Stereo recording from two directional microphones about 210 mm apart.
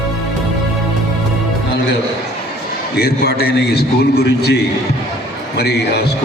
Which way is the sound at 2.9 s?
50° left (ahead or behind).